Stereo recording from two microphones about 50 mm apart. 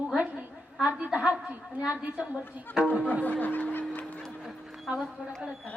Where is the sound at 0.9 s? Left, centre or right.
Right.